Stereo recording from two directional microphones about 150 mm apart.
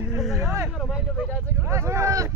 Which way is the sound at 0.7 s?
Centre (ahead or behind).